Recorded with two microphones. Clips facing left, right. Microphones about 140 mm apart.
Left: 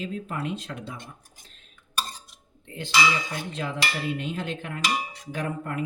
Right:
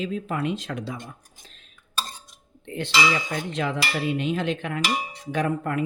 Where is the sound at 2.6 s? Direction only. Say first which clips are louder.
Right 6 dB; 70° right (ahead or behind).